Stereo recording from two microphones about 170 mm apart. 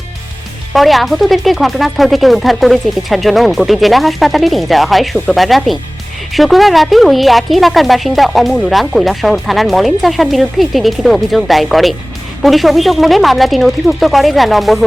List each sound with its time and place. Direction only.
0.7 s a woman's voice: centre (ahead or behind)